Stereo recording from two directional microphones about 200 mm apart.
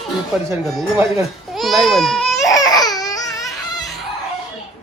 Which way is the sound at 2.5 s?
20° left (ahead or behind).